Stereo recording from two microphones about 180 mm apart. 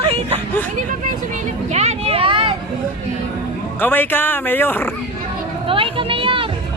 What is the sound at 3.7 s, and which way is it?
Speech, 10° left (ahead or behind).